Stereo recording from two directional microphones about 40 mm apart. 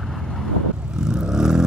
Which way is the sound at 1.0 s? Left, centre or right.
Centre.